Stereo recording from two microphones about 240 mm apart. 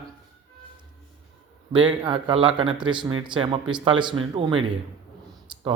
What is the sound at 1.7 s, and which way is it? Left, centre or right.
Speech, centre.